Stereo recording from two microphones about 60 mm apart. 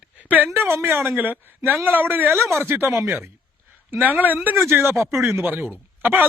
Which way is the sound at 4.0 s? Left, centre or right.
Right.